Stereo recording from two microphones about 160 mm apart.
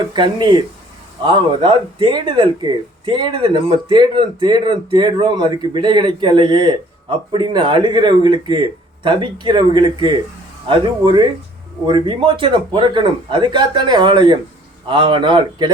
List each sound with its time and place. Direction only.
0.1 s speech: 30° right (ahead or behind)